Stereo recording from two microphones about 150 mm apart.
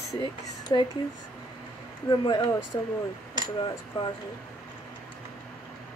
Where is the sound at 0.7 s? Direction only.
30° left (ahead or behind).